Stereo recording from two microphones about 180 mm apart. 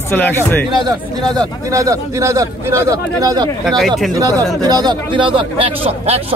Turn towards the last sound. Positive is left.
turn(degrees=-30)  # may be behind; listen again after turning